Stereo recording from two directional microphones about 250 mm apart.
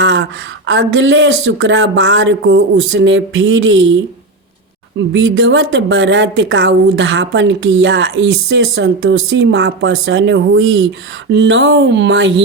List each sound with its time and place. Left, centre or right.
0.0 s speech: right
5.1 s speech: right